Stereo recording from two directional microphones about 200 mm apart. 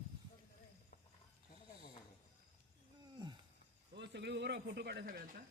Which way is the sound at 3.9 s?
60° right (ahead or behind).